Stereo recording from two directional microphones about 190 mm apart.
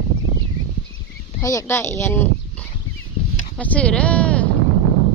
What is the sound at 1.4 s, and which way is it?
Speech, 15° left (ahead or behind).